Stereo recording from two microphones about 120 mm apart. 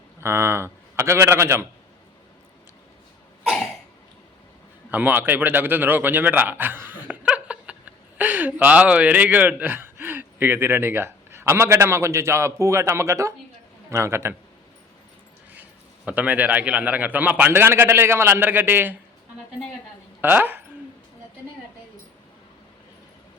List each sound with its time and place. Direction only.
0.2 s a man's voice: 20° right (ahead or behind)
4.9 s a man's voice: 15° right (ahead or behind)
16.0 s a man's voice: 10° right (ahead or behind)
20.2 s a man's voice: 15° right (ahead or behind)